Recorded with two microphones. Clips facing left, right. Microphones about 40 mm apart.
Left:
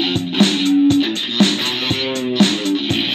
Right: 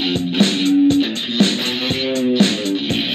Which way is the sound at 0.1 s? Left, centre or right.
Left.